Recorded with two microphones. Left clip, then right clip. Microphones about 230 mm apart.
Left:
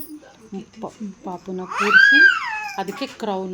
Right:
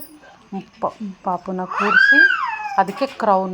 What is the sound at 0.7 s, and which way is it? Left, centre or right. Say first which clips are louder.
Speech: right 12 dB; centre.